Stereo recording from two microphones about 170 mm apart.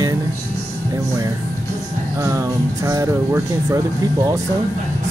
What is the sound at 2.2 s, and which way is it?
Speech, 20° right (ahead or behind).